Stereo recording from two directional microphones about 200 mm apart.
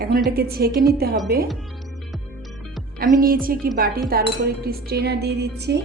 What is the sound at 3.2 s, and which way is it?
Speech, 45° right (ahead or behind).